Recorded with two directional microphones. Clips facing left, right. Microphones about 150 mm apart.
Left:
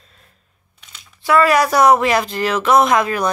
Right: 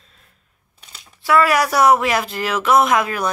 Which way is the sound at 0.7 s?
35° right (ahead or behind).